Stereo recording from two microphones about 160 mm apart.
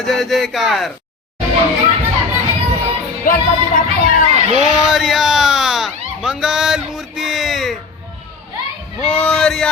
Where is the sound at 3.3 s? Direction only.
55° left (ahead or behind).